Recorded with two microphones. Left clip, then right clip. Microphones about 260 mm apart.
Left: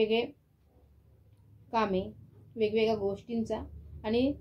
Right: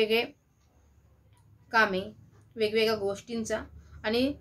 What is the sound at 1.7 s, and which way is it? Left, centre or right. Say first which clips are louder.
A woman's voice: right 5 dB; centre.